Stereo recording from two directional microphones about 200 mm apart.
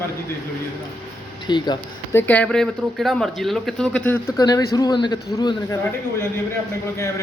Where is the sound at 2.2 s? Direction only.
5° left (ahead or behind).